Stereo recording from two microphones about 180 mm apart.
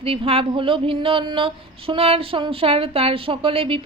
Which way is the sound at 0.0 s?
30° right (ahead or behind).